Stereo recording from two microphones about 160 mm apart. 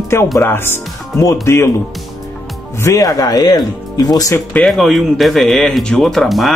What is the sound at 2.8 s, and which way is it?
Speech, 20° left (ahead or behind).